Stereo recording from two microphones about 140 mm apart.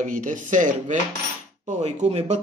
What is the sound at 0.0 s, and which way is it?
Speech, 65° right (ahead or behind).